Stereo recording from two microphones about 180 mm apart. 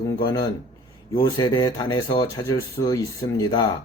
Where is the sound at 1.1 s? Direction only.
20° left (ahead or behind).